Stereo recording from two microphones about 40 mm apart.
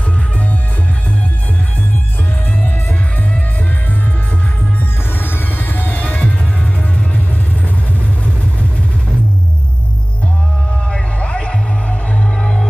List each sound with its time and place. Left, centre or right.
5.2 s music: left
6.1 s music: left
10.9 s music: left